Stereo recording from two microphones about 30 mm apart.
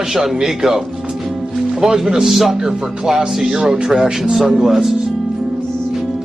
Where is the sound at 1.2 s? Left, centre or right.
Centre.